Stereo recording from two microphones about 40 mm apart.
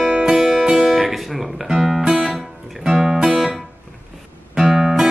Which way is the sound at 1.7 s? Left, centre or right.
Centre.